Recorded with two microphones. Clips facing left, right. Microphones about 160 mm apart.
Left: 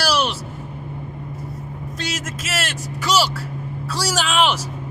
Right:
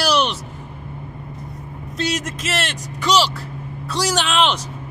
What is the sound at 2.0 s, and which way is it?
A man's voice, 5° left (ahead or behind).